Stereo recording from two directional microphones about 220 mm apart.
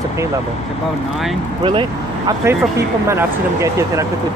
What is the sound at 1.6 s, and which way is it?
Speech, 20° right (ahead or behind).